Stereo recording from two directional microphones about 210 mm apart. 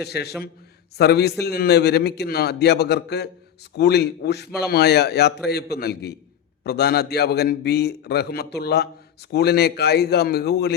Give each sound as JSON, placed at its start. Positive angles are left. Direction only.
{"t": 0.0, "sound": "a man's voice", "side_deg": 50}